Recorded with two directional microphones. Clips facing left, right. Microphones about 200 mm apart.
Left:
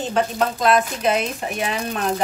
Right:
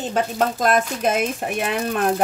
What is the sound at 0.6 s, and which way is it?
Speech, 45° right (ahead or behind).